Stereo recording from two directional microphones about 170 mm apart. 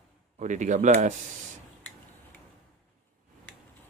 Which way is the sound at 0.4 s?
45° right (ahead or behind).